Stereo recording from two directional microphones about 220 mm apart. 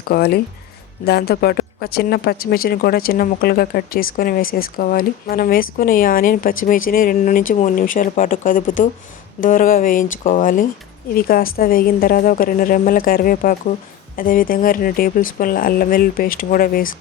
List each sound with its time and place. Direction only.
0.1 s speech: 45° left (ahead or behind)